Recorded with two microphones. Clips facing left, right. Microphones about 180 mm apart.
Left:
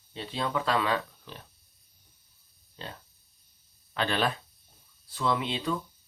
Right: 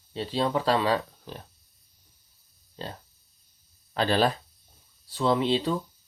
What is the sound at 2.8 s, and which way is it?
Speech, 35° right (ahead or behind).